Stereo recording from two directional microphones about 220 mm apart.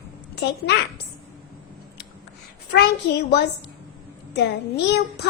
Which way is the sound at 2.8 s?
50° left (ahead or behind).